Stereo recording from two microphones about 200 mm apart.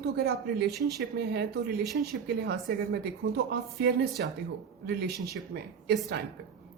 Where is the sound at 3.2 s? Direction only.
55° right (ahead or behind).